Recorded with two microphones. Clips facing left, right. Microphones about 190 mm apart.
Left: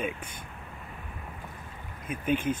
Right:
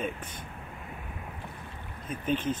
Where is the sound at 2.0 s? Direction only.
10° left (ahead or behind).